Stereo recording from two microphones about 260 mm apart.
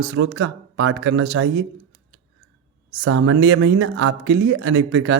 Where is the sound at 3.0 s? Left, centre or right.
Right.